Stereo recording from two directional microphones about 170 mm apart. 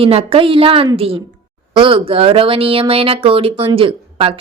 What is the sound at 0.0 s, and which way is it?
Speech, 35° right (ahead or behind).